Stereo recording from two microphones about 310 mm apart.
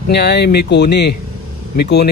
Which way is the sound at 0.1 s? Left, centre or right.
Left.